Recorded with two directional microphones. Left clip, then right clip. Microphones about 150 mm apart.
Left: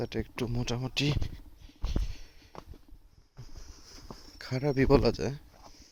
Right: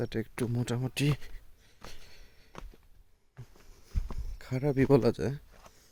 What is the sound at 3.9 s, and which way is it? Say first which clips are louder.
Speech: left 2 dB; 15° right (ahead or behind).